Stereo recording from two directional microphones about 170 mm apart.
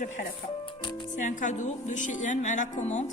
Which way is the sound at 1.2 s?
50° left (ahead or behind).